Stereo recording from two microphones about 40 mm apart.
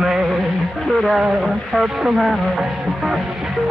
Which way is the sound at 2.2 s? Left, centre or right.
Centre.